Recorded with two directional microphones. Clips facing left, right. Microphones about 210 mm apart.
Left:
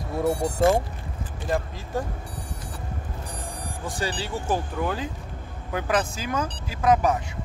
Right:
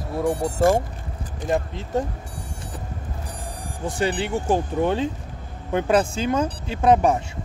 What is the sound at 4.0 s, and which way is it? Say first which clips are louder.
Speech: right 7 dB; 20° right (ahead or behind).